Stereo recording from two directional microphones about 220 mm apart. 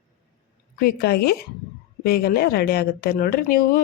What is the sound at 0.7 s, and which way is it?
Speech, 45° left (ahead or behind).